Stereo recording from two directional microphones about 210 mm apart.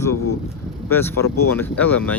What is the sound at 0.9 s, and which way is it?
Speech, 10° left (ahead or behind).